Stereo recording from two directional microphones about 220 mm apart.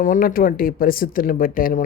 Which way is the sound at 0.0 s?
40° left (ahead or behind).